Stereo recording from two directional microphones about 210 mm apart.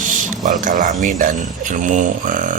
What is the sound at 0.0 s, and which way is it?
Speech, 40° right (ahead or behind).